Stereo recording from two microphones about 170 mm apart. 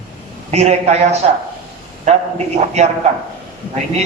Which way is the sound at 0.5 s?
40° right (ahead or behind).